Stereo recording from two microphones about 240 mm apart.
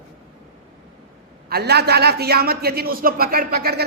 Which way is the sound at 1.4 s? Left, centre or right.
Right.